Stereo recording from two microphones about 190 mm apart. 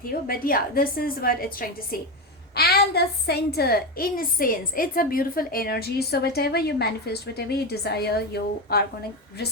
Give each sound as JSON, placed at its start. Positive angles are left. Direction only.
{"t": 0.1, "sound": "a woman's voice", "side_deg": 50}